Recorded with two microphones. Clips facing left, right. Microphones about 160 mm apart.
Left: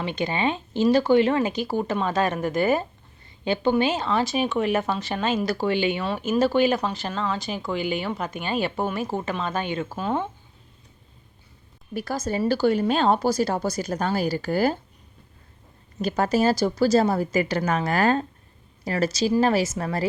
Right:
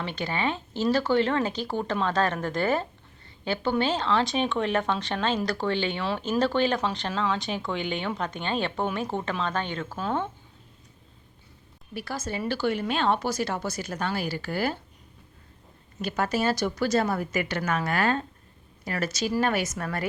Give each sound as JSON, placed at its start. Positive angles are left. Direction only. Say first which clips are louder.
{"t": 0.0, "sound": "a woman's voice", "louder": "left 4 dB", "side_deg": 15}
{"t": 11.9, "sound": "speech", "louder": "left 6 dB", "side_deg": 40}
{"t": 16.0, "sound": "speech", "louder": "left 5 dB", "side_deg": 40}